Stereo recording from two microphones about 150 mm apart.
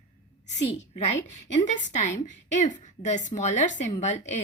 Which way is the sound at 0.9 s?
50° left (ahead or behind).